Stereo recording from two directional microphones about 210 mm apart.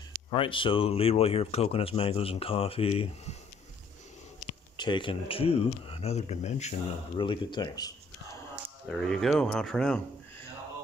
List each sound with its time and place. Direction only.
0.3 s speech: 25° left (ahead or behind)
4.7 s speech: 20° left (ahead or behind)
7.2 s speech: 20° left (ahead or behind)
8.9 s speech: centre (ahead or behind)